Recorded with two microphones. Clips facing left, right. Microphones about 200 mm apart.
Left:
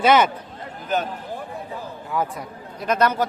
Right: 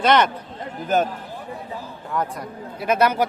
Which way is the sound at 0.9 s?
45° right (ahead or behind).